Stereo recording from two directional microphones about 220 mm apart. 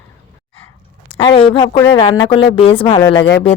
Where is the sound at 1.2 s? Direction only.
25° left (ahead or behind).